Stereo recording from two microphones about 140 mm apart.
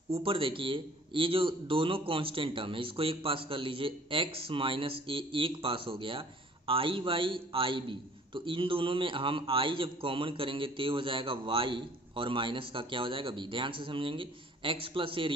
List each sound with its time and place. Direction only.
0.1 s a man's voice: 40° right (ahead or behind)